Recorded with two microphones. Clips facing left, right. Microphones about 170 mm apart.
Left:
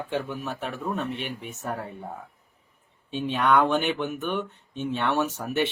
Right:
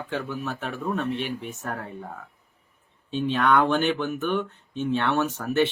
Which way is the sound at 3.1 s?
55° left (ahead or behind).